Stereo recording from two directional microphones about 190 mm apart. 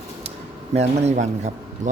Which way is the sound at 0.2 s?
35° right (ahead or behind).